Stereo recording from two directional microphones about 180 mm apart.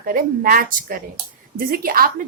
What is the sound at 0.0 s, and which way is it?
A woman's voice, 55° right (ahead or behind).